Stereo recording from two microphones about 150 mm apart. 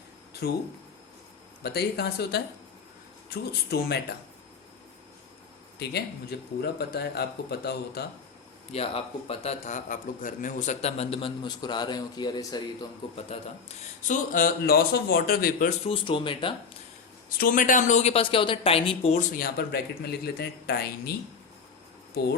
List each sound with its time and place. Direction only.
0.4 s speech: 90° left
1.6 s speech: 90° left
6.6 s speech: 90° left
8.7 s a man's voice: 40° left (ahead or behind)
13.1 s speech: 45° left (ahead or behind)
14.3 s a man's voice: 75° left (ahead or behind)
15.9 s a man's voice: 35° left (ahead or behind)
17.2 s speech: 75° left (ahead or behind); by 19.2 s 40° left (ahead or behind)
19.3 s speech: 75° left (ahead or behind); by 22.4 s 90° left